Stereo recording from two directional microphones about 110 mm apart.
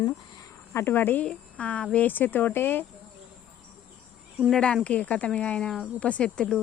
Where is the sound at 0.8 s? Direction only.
20° left (ahead or behind).